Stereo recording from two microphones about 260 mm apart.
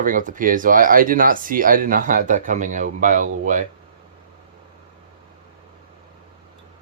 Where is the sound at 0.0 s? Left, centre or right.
Right.